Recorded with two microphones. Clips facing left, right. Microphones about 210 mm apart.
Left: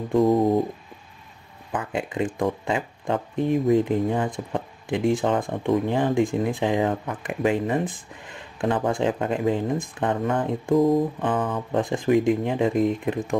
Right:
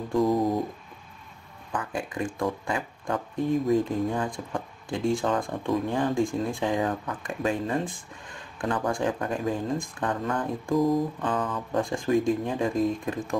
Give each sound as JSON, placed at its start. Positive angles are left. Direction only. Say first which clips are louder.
{"t": 0.1, "sound": "speech", "louder": "left 5 dB", "side_deg": 25}
{"t": 1.7, "sound": "speech", "louder": "left 4 dB", "side_deg": 20}